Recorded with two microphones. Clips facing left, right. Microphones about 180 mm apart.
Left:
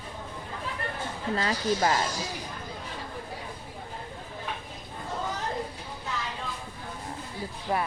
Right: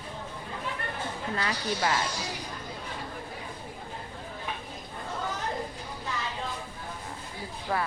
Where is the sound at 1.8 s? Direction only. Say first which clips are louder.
Left 1 dB; 40° left (ahead or behind).